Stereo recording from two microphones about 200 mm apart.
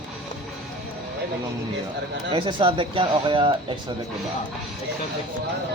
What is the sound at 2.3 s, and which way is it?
Speech, 25° right (ahead or behind).